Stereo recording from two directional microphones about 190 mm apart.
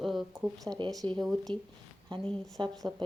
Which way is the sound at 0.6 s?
25° right (ahead or behind).